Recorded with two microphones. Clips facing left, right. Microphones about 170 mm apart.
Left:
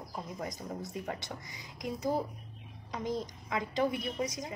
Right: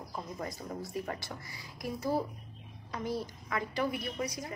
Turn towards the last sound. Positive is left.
turn(degrees=20)  # may be behind; listen again after turning